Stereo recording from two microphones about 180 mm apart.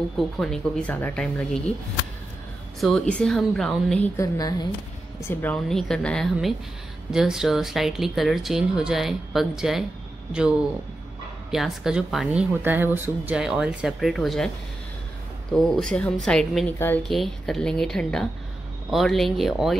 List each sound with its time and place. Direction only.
0.2 s a woman's voice: centre (ahead or behind)
2.8 s a woman's voice: 5° left (ahead or behind)
4.2 s a woman's voice: 20° left (ahead or behind)
5.3 s a woman's voice: 10° left (ahead or behind)
11.5 s a woman's voice: centre (ahead or behind)
15.5 s a woman's voice: centre (ahead or behind)
17.1 s a woman's voice: centre (ahead or behind)